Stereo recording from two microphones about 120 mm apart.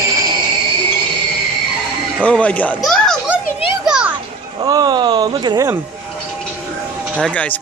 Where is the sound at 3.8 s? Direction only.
5° right (ahead or behind).